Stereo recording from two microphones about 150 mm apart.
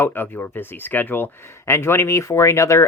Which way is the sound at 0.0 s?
15° left (ahead or behind).